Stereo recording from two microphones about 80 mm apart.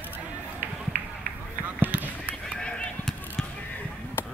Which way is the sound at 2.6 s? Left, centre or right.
Centre.